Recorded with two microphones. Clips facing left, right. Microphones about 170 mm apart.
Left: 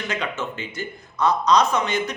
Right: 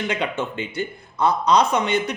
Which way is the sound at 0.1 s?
30° right (ahead or behind).